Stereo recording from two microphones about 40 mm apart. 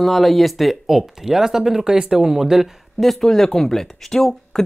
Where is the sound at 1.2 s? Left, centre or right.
Centre.